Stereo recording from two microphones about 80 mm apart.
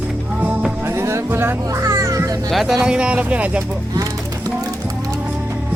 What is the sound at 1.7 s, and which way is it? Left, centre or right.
Music, right.